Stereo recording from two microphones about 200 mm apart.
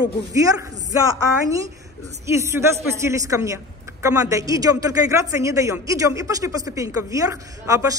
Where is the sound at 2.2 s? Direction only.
15° right (ahead or behind).